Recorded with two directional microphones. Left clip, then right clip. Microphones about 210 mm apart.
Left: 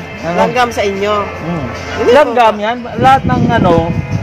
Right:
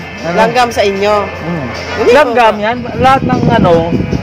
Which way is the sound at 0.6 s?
35° right (ahead or behind).